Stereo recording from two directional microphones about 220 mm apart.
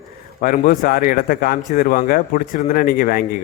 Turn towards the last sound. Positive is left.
turn(degrees=40)  # may be behind; listen again after turning